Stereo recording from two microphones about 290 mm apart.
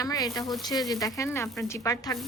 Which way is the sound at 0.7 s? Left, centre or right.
Centre.